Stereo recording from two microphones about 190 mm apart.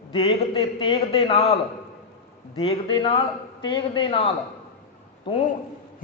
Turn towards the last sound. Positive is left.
turn(degrees=25)  # may be behind; listen again after turning